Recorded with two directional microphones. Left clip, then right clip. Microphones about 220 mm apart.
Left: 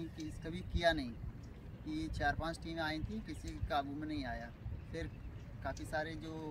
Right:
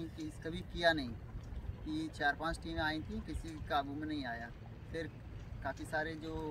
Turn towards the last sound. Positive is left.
turn(degrees=5)  # may be behind; listen again after turning